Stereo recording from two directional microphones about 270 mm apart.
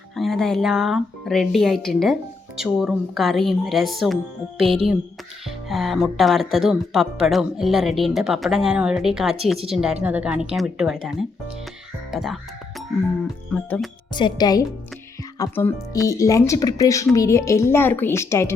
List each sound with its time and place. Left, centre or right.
0.2 s speech: centre
13.5 s speech: centre
14.1 s speech: centre